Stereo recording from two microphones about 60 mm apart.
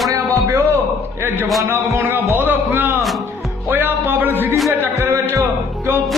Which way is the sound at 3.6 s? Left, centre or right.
Right.